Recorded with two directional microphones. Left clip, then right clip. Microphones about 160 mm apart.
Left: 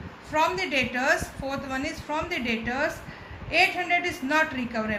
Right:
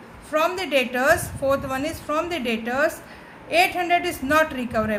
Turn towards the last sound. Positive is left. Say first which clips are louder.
# right 5 dB
turn(degrees=-50)  # may be behind; listen again after turning